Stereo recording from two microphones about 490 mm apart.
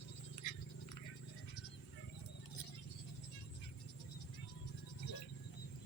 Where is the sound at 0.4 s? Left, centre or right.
Left.